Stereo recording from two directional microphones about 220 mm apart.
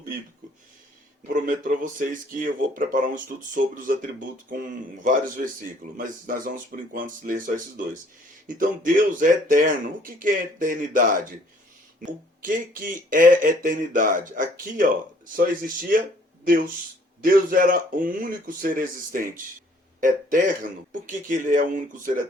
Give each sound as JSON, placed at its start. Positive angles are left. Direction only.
{"t": 1.3, "sound": "speech", "side_deg": -35}
{"t": 12.4, "sound": "speech", "side_deg": -40}